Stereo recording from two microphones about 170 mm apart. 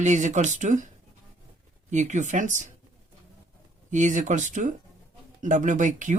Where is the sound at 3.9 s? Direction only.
45° right (ahead or behind).